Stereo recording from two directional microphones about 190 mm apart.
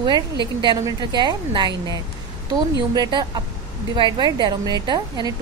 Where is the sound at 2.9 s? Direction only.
20° right (ahead or behind).